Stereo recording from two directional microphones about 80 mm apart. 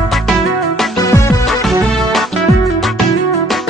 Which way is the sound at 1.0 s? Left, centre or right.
Left.